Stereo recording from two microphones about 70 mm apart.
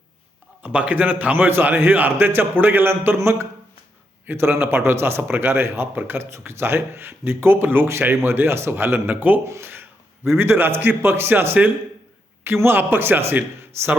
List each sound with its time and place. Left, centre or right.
0.6 s a man's voice: centre